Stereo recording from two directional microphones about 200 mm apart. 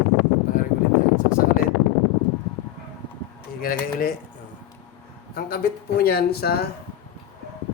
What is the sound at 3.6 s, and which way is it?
Speech, 45° left (ahead or behind).